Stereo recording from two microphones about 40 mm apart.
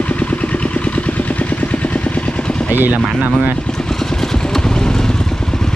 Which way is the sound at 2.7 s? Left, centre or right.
Right.